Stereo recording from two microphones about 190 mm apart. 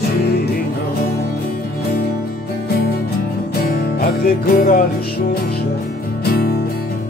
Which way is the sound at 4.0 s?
50° left (ahead or behind).